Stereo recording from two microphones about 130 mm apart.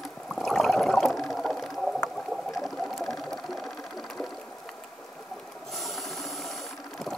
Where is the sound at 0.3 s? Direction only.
Centre (ahead or behind).